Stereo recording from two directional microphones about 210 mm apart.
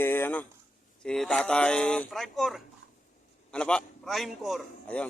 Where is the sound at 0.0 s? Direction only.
10° left (ahead or behind).